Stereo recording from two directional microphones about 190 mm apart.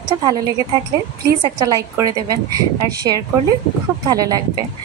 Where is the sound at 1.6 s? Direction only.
15° right (ahead or behind).